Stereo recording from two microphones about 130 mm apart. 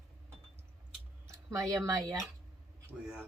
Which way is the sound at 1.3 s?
25° right (ahead or behind).